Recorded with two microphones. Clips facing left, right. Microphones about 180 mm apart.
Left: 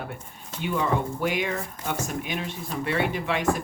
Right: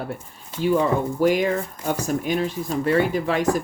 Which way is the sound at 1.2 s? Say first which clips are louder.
Right 8 dB; 40° right (ahead or behind).